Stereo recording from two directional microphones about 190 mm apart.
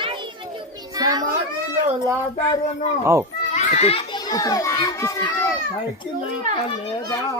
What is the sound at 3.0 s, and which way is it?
Speech, 15° right (ahead or behind).